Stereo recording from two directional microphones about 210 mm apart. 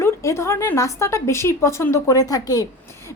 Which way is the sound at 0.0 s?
15° left (ahead or behind).